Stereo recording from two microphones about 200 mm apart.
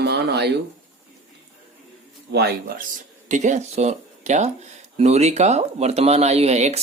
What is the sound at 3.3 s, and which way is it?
Speech, 35° right (ahead or behind).